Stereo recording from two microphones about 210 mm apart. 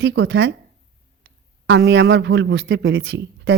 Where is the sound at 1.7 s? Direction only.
55° right (ahead or behind).